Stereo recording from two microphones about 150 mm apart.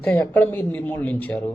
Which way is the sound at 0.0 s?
10° left (ahead or behind).